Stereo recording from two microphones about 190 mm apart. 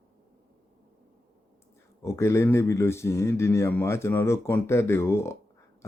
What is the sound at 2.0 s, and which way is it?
Speech, 15° left (ahead or behind).